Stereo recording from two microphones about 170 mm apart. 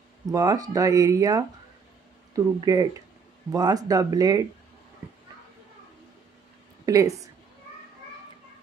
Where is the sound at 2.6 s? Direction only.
20° right (ahead or behind).